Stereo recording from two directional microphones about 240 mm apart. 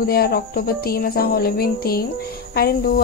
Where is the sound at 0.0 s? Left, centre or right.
Left.